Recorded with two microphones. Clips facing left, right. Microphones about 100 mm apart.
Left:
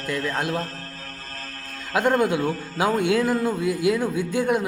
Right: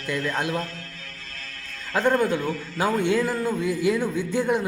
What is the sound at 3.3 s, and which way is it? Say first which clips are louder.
Speech: left 2 dB; 45° left (ahead or behind).